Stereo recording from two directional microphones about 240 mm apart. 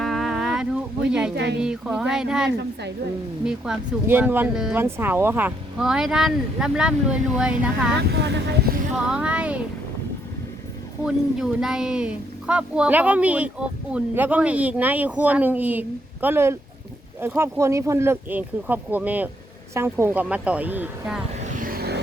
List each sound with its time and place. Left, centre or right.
0.0 s boat: centre
1.6 s speech: centre
2.5 s speech: right
3.4 s speech: centre
8.1 s speech: right
9.0 s speech: centre
11.0 s speech: centre
21.4 s vehicle: right